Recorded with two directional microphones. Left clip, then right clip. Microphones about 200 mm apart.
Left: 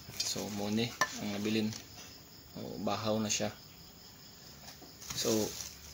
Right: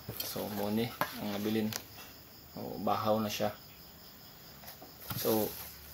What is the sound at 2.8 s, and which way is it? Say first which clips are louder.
Speech: right 3 dB; 15° left (ahead or behind).